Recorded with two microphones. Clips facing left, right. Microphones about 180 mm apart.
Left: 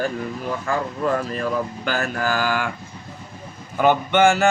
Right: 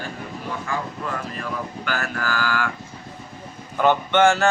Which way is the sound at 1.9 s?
25° left (ahead or behind).